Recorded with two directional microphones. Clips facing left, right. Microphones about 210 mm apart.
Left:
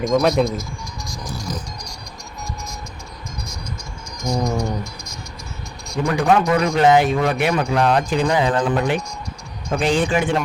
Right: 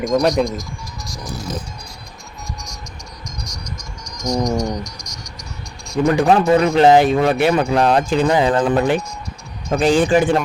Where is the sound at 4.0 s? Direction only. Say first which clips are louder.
Right 2 dB; 5° left (ahead or behind).